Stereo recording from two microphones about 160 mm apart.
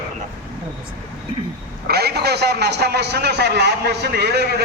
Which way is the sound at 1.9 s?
90° right.